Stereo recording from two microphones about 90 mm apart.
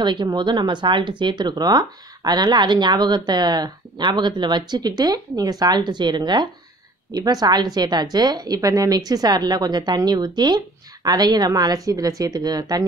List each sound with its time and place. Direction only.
0.0 s speech: 60° right (ahead or behind)
7.1 s a woman's voice: 45° right (ahead or behind)